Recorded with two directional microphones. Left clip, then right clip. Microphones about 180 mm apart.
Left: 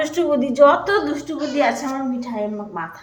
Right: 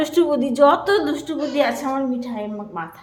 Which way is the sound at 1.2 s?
15° right (ahead or behind).